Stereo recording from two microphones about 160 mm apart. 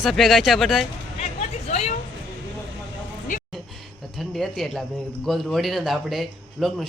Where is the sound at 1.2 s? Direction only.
45° left (ahead or behind).